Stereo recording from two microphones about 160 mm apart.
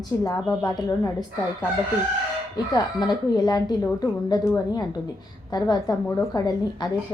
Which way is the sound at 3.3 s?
25° left (ahead or behind).